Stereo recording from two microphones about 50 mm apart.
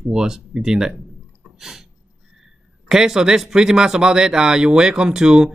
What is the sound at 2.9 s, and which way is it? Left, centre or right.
Speech, centre.